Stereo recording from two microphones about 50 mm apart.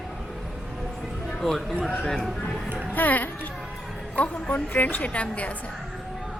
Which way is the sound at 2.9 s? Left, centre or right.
Left.